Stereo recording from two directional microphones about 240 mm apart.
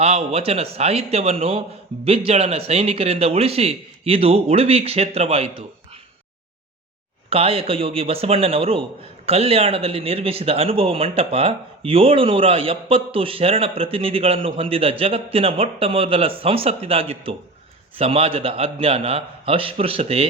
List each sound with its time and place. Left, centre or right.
0.0 s a man's voice: right
7.3 s a man's voice: right